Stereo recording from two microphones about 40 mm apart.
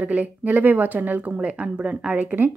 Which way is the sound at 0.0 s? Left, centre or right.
Right.